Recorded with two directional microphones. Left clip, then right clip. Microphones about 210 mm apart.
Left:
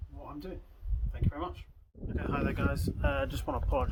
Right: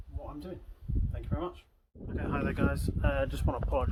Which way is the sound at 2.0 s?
Centre (ahead or behind).